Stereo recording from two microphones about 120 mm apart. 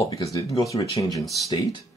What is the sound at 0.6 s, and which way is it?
Speech, 30° left (ahead or behind).